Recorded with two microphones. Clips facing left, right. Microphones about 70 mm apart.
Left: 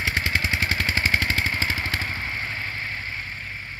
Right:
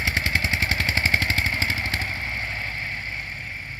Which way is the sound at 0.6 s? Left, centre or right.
Right.